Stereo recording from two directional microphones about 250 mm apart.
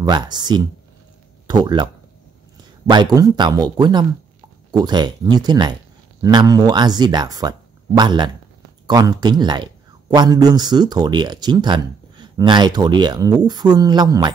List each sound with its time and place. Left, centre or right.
0.0 s a man's voice: centre
2.9 s a man's voice: centre